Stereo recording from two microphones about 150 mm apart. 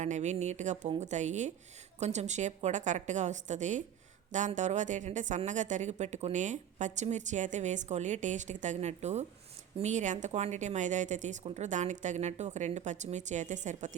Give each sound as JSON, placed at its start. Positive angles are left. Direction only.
{"t": 0.0, "sound": "a woman's voice", "side_deg": -50}